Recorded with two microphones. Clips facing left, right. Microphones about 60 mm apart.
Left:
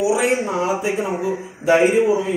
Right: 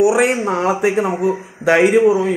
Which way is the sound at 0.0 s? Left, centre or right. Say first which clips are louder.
Right 4 dB; right.